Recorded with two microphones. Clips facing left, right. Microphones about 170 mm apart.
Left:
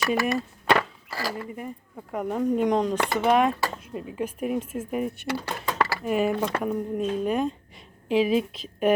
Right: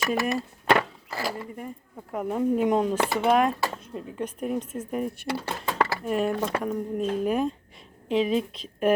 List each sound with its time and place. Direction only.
0.0 s speech: centre (ahead or behind)
0.8 s a sound: 20° right (ahead or behind)
2.1 s speech: centre (ahead or behind)